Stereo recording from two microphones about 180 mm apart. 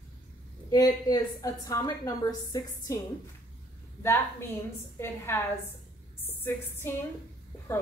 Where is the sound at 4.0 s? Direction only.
15° left (ahead or behind).